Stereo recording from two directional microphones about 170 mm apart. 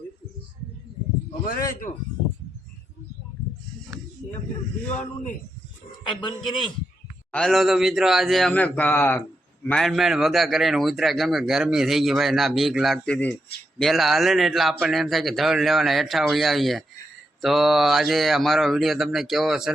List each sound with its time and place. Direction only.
1.3 s a man's voice: 50° left (ahead or behind)
7.3 s a man's voice: centre (ahead or behind)